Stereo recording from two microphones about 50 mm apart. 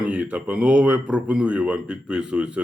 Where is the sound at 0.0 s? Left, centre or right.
Right.